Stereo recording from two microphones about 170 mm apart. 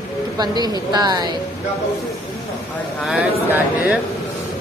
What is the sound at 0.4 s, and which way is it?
Speech, 25° right (ahead or behind).